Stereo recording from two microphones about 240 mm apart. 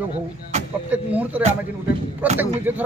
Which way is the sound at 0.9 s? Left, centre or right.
Centre.